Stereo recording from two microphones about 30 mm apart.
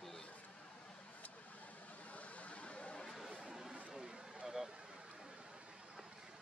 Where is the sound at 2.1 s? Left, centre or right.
Left.